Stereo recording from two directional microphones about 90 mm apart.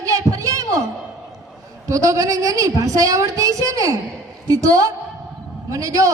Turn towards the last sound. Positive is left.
turn(degrees=-40)  # may be behind; listen again after turning